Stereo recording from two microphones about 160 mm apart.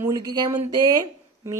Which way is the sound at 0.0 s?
25° right (ahead or behind).